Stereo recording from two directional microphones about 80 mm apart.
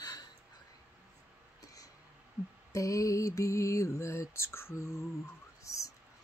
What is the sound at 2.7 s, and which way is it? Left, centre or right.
Mantra, left.